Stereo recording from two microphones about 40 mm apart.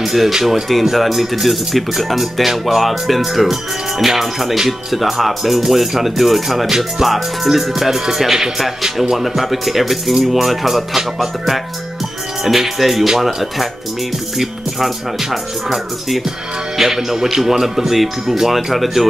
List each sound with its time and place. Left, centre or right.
0.0 s speech: centre
0.3 s speech: centre
0.9 s speech: centre
16.7 s speech: centre